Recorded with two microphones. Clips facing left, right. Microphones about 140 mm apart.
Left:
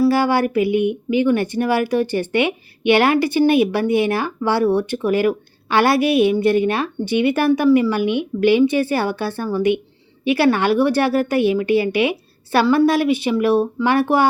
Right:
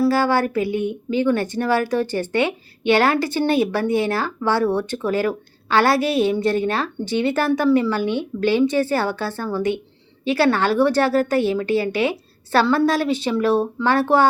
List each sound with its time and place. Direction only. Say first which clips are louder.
0.1 s speech: left 2 dB; 15° left (ahead or behind)